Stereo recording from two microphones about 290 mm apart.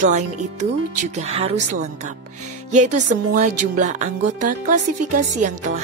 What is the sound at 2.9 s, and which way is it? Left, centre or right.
A woman's voice, right.